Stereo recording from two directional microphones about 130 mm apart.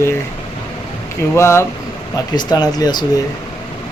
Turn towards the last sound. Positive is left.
turn(degrees=30)  # may be behind; listen again after turning